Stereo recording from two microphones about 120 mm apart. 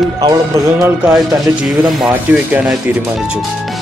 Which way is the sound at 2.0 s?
10° right (ahead or behind).